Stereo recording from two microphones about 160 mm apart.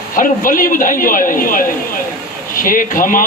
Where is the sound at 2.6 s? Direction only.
60° left (ahead or behind).